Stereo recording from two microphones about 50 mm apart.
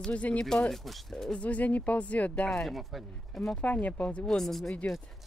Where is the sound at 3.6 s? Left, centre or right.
Left.